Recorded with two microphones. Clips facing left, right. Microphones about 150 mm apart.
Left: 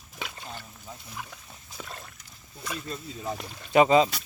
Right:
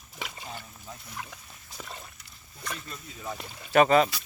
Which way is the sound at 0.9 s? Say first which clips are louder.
Left 1 dB; centre (ahead or behind).